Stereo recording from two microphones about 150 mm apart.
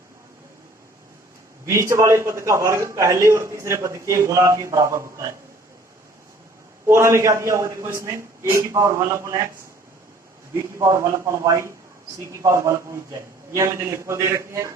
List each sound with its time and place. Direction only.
1.6 s a man's voice: 20° right (ahead or behind)
6.8 s a man's voice: 15° right (ahead or behind)
10.5 s a man's voice: 20° right (ahead or behind)